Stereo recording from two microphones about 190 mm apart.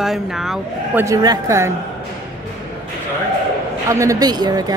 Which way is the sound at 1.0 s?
15° right (ahead or behind).